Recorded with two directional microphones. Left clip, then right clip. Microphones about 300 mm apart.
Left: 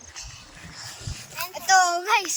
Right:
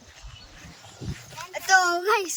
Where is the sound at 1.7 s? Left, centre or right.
Centre.